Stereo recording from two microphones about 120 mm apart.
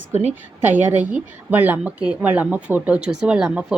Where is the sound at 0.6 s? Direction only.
15° right (ahead or behind).